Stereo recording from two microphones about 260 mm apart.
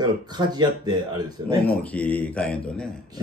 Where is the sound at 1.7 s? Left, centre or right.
Centre.